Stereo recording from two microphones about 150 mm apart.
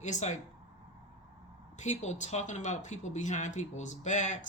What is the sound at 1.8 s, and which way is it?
Speech, 50° left (ahead or behind).